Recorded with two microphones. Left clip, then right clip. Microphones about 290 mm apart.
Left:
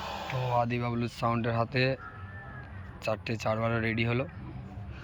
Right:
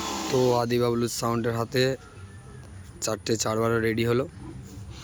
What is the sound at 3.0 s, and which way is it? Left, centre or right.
Speech, centre.